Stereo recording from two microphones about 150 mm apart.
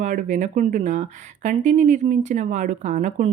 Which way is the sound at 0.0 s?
55° right (ahead or behind).